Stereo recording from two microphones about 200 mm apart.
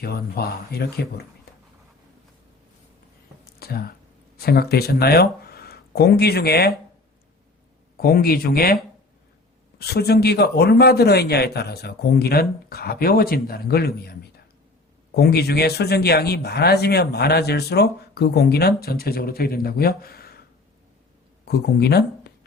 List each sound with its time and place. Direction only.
0.0 s a man's voice: 50° left (ahead or behind)
3.6 s speech: 50° left (ahead or behind)
7.9 s a man's voice: 50° left (ahead or behind)
21.4 s speech: 55° left (ahead or behind)